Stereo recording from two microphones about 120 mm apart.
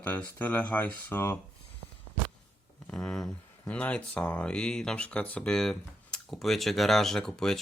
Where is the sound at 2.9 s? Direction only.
5° left (ahead or behind).